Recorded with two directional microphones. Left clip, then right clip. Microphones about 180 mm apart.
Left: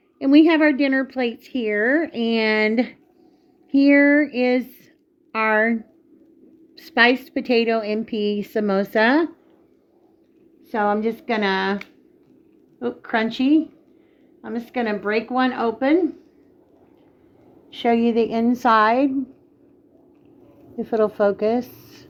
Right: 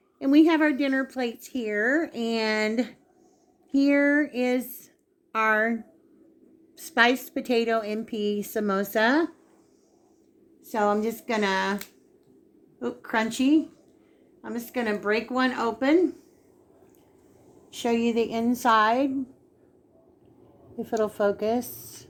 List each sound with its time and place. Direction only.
0.2 s a woman's voice: 40° left (ahead or behind)
10.7 s a woman's voice: 40° left (ahead or behind)
12.8 s a woman's voice: 40° left (ahead or behind)
17.7 s a woman's voice: 40° left (ahead or behind)
20.7 s a woman's voice: 40° left (ahead or behind)